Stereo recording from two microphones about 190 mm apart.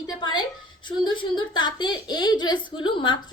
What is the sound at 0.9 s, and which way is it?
A woman's voice, 25° left (ahead or behind).